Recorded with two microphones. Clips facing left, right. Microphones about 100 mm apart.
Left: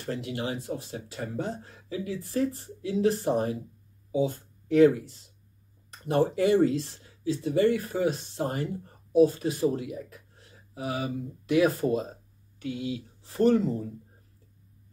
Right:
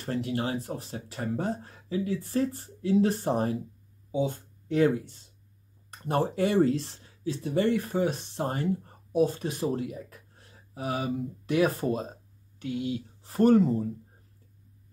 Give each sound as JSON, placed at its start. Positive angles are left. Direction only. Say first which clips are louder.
{"t": 0.0, "sound": "speech", "louder": "right 2 dB", "side_deg": -35}